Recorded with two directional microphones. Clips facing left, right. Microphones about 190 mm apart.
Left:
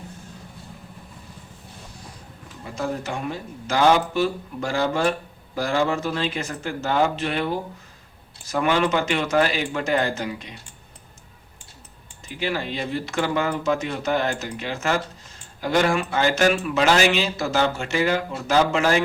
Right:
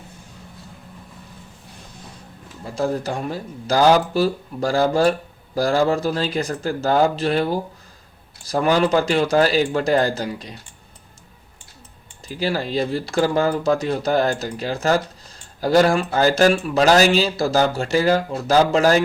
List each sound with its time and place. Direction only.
2.7 s a man's voice: 35° right (ahead or behind)
12.3 s a man's voice: 35° right (ahead or behind)